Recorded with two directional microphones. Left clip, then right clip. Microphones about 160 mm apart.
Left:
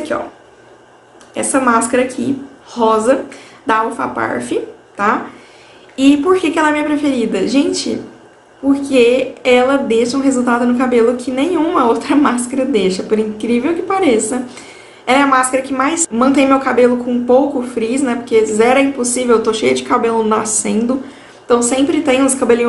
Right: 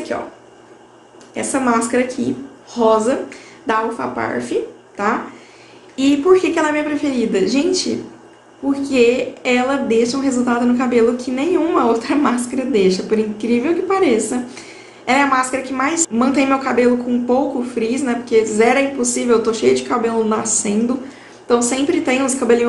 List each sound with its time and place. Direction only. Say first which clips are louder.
1.3 s a woman's voice: left 4 dB; 15° left (ahead or behind)